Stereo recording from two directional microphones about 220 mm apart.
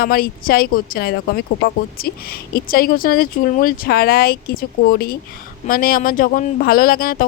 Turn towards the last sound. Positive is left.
turn(degrees=40)  # may be behind; listen again after turning